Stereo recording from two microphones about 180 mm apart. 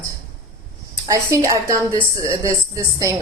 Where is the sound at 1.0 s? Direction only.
20° right (ahead or behind).